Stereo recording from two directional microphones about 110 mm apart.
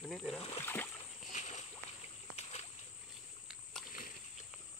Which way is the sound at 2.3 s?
80° left.